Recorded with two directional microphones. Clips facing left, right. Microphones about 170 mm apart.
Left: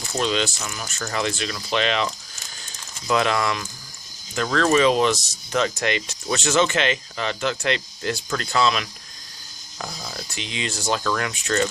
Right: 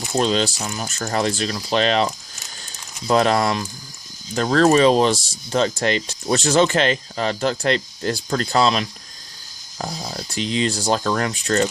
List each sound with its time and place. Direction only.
0.2 s speech: 35° right (ahead or behind)
3.1 s speech: 35° right (ahead or behind)